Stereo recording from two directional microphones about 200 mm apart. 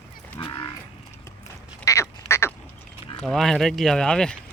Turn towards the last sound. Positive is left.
turn(degrees=5)  # may be behind; listen again after turning